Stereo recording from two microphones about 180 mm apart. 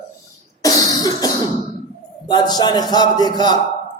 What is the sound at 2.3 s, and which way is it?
Speech, 25° left (ahead or behind).